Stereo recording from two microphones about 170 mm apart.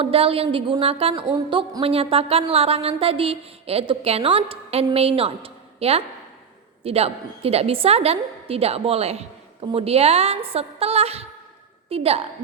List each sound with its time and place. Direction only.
0.0 s a woman's voice: 35° right (ahead or behind)